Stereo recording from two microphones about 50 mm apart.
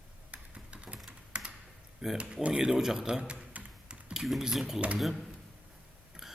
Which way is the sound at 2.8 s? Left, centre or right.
Centre.